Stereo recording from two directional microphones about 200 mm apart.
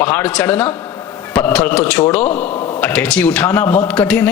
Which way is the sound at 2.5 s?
25° left (ahead or behind).